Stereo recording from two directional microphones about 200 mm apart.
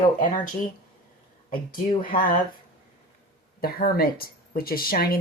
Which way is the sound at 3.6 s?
50° left (ahead or behind).